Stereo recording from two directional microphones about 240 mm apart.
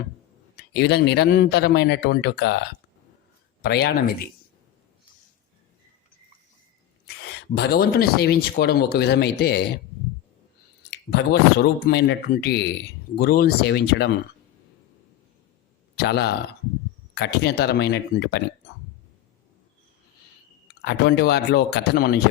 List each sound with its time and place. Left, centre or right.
0.5 s speech: left
3.6 s speech: left
7.2 s speech: left
10.9 s speech: left
16.0 s speech: left
20.8 s speech: left